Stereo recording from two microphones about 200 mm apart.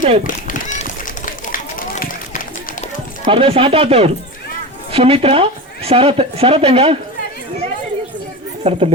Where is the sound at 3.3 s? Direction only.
30° right (ahead or behind).